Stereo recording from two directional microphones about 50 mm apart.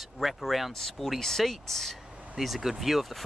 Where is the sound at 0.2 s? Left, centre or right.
Centre.